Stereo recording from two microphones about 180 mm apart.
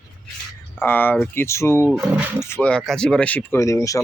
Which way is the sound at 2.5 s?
5° left (ahead or behind).